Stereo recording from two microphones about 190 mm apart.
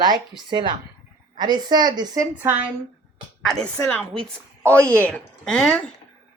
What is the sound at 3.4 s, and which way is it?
A woman's voice, 5° left (ahead or behind).